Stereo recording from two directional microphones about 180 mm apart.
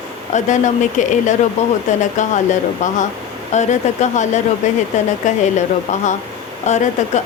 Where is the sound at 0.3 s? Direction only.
45° left (ahead or behind).